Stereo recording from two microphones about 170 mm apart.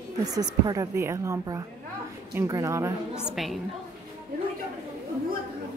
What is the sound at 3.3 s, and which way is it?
Speech, centre (ahead or behind).